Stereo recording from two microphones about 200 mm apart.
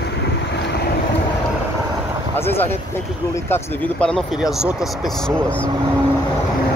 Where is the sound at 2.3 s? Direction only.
10° left (ahead or behind).